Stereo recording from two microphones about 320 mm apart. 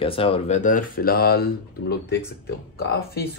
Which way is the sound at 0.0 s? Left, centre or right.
Centre.